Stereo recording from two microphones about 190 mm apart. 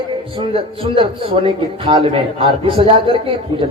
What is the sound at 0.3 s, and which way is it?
A man's voice, 30° right (ahead or behind).